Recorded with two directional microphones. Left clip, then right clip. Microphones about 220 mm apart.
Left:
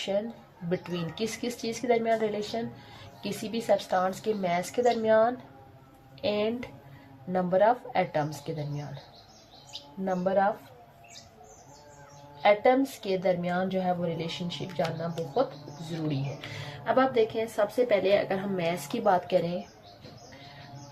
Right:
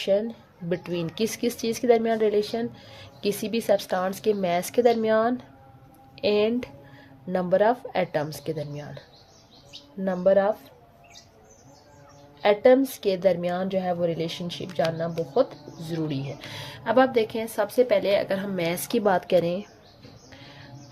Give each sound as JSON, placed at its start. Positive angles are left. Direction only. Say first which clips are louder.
{"t": 0.7, "sound": "speech", "louder": "right 4 dB", "side_deg": -55}
{"t": 10.0, "sound": "speech", "louder": "right 5 dB", "side_deg": -55}
{"t": 12.4, "sound": "speech", "louder": "right 4 dB", "side_deg": -55}
{"t": 15.9, "sound": "speech", "louder": "right 4 dB", "side_deg": -50}